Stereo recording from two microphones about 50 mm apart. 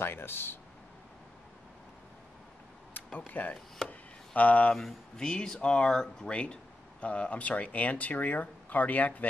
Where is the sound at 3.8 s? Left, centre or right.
Left.